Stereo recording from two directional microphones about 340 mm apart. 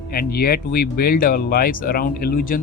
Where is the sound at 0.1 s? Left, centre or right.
Left.